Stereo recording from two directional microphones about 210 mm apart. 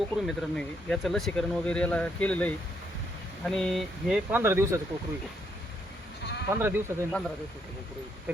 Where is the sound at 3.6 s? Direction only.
Centre (ahead or behind).